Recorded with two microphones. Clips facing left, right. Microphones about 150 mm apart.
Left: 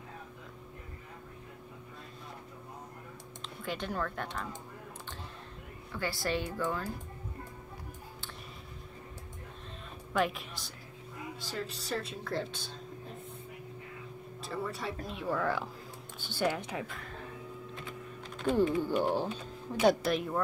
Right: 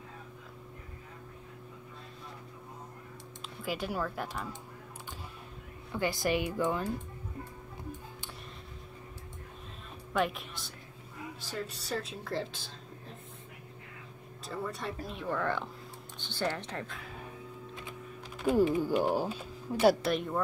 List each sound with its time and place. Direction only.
3.4 s speech: 5° right (ahead or behind)
5.9 s speech: 20° right (ahead or behind)
10.1 s speech: centre (ahead or behind)
14.4 s speech: centre (ahead or behind)
18.4 s speech: 10° right (ahead or behind)